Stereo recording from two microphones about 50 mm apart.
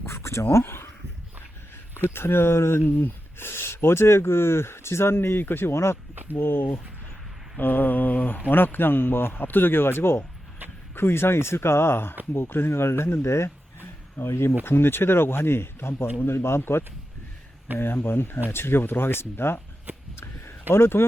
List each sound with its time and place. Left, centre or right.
0.0 s a sound: left
0.5 s speech: left
2.0 s speech: left
6.4 s speech: left
7.6 s mantra: left
8.4 s speech: left
14.2 s speech: left
20.1 s a sound: left